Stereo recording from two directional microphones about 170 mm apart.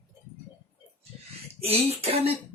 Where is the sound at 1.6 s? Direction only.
35° right (ahead or behind).